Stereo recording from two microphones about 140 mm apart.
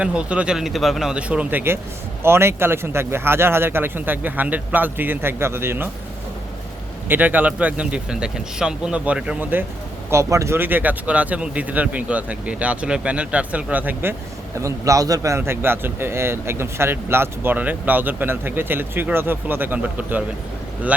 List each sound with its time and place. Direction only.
0.0 s a man's voice: 10° right (ahead or behind)
7.1 s a man's voice: 10° right (ahead or behind)